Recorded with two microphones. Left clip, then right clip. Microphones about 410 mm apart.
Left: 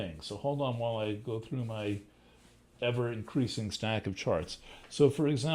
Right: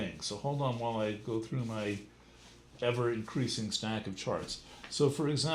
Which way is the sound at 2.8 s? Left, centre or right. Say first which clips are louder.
Right 1 dB; left.